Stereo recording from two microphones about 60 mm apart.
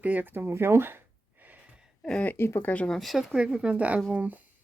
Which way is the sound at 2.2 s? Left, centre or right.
Left.